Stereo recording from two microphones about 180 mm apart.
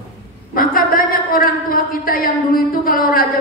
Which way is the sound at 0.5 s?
50° left (ahead or behind).